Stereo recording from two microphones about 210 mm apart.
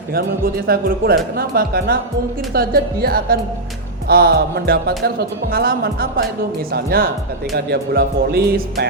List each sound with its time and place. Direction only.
0.1 s a man's voice: 45° right (ahead or behind)